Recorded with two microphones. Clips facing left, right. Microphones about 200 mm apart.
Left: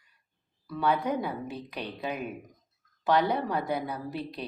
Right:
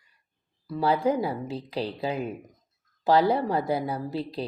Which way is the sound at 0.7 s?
30° right (ahead or behind).